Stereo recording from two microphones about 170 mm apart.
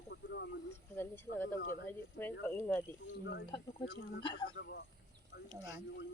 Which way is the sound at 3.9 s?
90° left.